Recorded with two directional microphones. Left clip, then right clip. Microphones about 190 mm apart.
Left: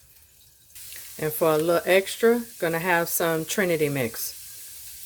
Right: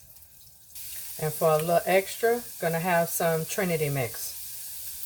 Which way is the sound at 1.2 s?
60° left (ahead or behind).